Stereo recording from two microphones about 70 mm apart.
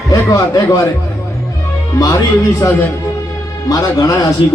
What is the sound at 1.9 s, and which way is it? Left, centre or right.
A man's voice, left.